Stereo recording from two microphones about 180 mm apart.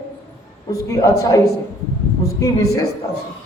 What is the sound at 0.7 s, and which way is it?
Speech, 20° left (ahead or behind).